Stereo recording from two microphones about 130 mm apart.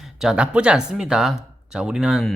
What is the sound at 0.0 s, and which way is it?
Speech, 5° right (ahead or behind).